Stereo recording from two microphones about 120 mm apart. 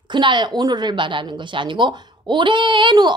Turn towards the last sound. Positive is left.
turn(degrees=-40)  # may be behind; listen again after turning